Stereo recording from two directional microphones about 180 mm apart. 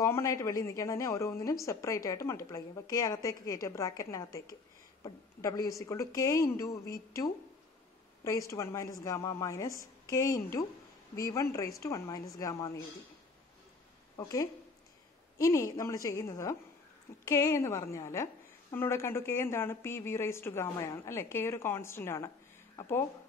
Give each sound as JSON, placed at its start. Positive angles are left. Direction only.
{"t": 0.0, "sound": "a woman's voice", "side_deg": 15}
{"t": 14.1, "sound": "a woman's voice", "side_deg": 20}